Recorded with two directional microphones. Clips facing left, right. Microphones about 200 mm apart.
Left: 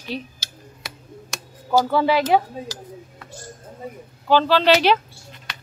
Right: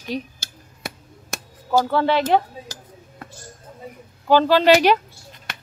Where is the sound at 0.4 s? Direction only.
50° right (ahead or behind).